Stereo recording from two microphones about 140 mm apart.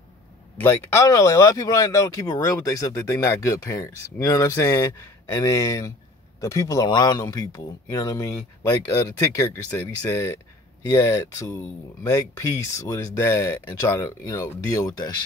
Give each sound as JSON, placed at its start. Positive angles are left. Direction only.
{"t": 0.6, "sound": "speech", "side_deg": 15}